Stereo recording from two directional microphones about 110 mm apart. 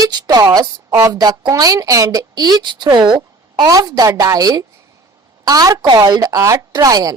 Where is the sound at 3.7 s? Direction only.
35° right (ahead or behind).